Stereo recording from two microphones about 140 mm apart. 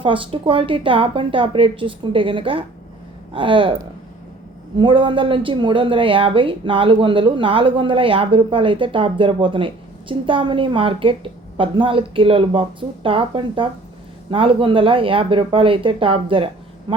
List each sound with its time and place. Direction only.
0.0 s speech: 40° right (ahead or behind)
4.8 s speech: 35° right (ahead or behind)